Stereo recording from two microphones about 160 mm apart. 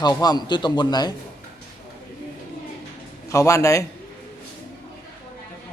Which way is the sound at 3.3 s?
20° left (ahead or behind).